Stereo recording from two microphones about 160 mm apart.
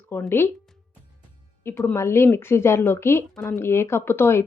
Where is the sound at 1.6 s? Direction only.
15° left (ahead or behind).